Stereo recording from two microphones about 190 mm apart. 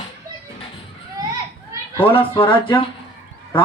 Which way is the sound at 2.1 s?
25° left (ahead or behind).